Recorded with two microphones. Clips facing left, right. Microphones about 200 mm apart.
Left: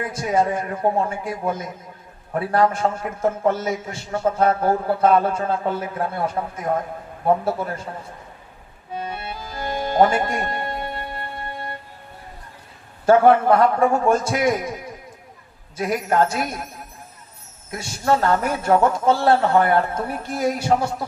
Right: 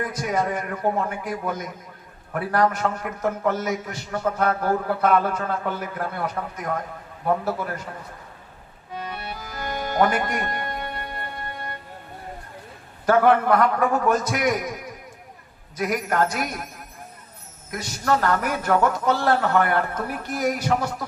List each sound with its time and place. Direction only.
0.0 s a man's voice: 25° left (ahead or behind)
9.0 s music: 25° left (ahead or behind)
13.1 s a man's voice: 25° left (ahead or behind)
17.7 s a man's voice: 25° left (ahead or behind)